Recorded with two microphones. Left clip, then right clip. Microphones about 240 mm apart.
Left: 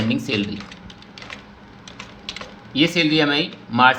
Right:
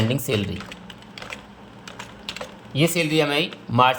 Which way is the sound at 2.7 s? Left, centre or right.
Right.